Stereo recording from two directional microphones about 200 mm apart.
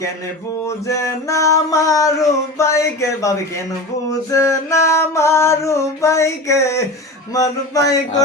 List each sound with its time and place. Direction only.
0.9 s mantra: 15° left (ahead or behind)